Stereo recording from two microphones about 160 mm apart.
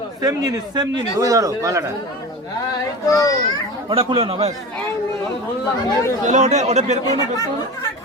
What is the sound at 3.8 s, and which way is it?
Speech, 35° right (ahead or behind).